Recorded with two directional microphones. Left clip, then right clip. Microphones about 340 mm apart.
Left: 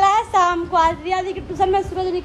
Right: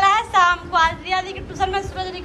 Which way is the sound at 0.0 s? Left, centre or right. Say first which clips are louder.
Even; centre.